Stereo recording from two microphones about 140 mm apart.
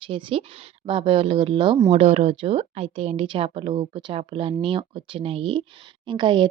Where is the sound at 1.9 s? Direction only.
50° right (ahead or behind).